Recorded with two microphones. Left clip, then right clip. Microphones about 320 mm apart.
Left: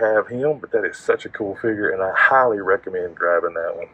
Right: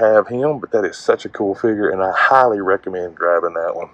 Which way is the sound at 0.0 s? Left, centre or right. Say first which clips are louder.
Right 5 dB; centre.